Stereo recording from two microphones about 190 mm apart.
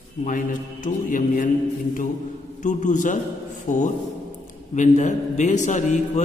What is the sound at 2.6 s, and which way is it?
A man's voice, 40° left (ahead or behind).